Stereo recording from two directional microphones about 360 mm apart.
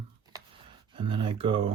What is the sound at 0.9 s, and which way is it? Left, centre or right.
Speech, centre.